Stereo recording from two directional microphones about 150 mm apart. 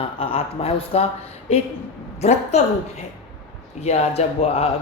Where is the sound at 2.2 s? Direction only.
45° left (ahead or behind).